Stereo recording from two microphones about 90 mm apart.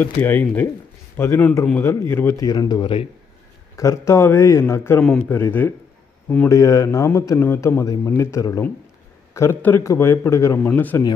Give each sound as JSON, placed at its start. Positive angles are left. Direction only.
{"t": 0.0, "sound": "a man's voice", "side_deg": 20}
{"t": 2.3, "sound": "a man's voice", "side_deg": 50}
{"t": 2.7, "sound": "a man's voice", "side_deg": 75}
{"t": 3.7, "sound": "a man's voice", "side_deg": 35}
{"t": 6.5, "sound": "a man's voice", "side_deg": 35}
{"t": 7.3, "sound": "a man's voice", "side_deg": 25}
{"t": 9.6, "sound": "a man's voice", "side_deg": 20}
{"t": 10.6, "sound": "a man's voice", "side_deg": 20}